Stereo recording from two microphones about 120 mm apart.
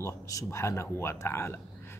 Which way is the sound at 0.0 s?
25° left (ahead or behind).